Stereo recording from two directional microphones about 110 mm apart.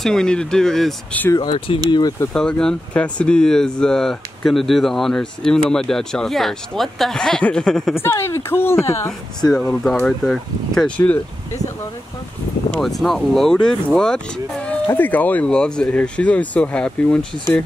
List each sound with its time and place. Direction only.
0.0 s speech: 5° left (ahead or behind)
1.3 s speech: 40° left (ahead or behind)
2.3 s speech: 5° left (ahead or behind)
7.9 s speech: 20° left (ahead or behind)
9.4 s speech: 10° left (ahead or behind)
12.7 s speech: centre (ahead or behind)